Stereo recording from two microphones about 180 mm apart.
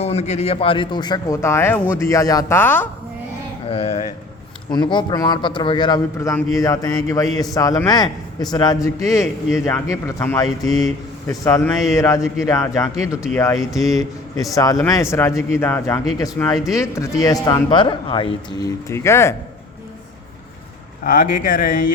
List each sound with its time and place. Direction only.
0.0 s a man's voice: 35° left (ahead or behind); by 2.8 s 10° left (ahead or behind)
3.7 s a man's voice: 35° left (ahead or behind)
18.9 s a man's voice: 15° left (ahead or behind)
21.0 s speech: 55° left (ahead or behind)